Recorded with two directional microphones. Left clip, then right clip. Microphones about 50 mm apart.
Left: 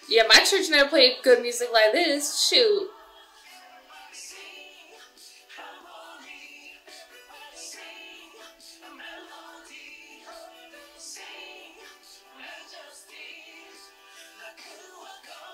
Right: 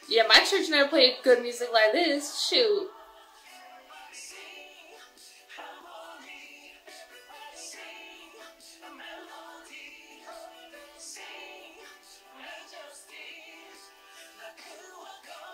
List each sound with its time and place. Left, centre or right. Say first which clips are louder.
0.1 s a woman's voice: left 3 dB; left
2.1 s a woman's voice: left 4 dB; centre
2.7 s a woman's voice: left 3 dB; centre
3.9 s music: left 2 dB; right
14.4 s music: left 1 dB; right